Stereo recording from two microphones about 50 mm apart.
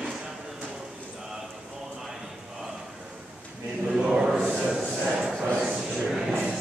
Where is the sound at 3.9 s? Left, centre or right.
Centre.